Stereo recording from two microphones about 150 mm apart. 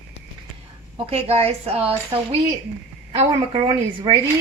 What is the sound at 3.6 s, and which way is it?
Speech, 35° right (ahead or behind).